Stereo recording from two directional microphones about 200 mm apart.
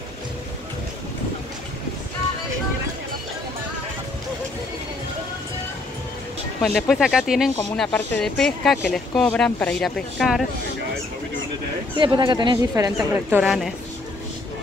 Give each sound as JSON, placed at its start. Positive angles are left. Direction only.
{"t": 6.6, "sound": "speech", "side_deg": 0}
{"t": 12.0, "sound": "speech", "side_deg": -25}